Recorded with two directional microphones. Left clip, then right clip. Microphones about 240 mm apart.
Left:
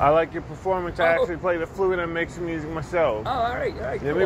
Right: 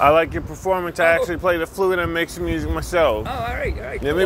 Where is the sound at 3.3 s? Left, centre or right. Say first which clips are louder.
Left 1 dB; right.